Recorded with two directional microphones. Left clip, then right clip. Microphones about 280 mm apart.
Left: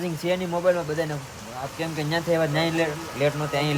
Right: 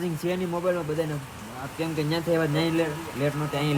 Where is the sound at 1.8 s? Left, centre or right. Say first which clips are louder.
Even; centre.